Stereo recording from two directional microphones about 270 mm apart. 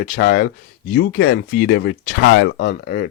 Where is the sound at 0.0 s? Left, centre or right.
Left.